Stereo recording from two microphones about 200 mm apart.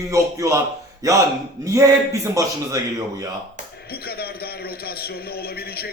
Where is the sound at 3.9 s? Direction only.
50° left (ahead or behind).